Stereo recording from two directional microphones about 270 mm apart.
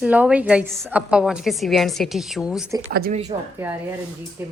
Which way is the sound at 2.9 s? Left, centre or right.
Right.